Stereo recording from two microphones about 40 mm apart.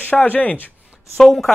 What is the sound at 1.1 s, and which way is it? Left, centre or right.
Speech, centre.